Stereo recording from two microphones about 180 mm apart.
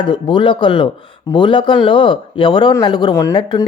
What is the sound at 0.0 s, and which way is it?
Speech, 25° left (ahead or behind).